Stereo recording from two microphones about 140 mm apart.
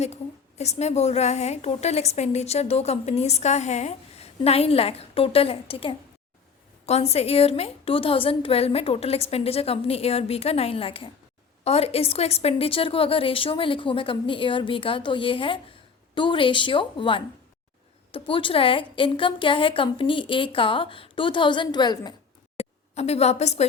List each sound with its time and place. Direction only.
0.6 s a woman's voice: 50° left (ahead or behind); by 22.1 s 30° left (ahead or behind)
22.5 s a woman's voice: 50° left (ahead or behind)